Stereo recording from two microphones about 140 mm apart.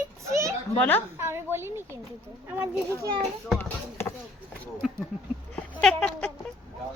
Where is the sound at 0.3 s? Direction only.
20° right (ahead or behind).